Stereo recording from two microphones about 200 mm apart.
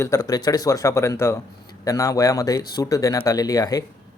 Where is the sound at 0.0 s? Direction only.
15° left (ahead or behind).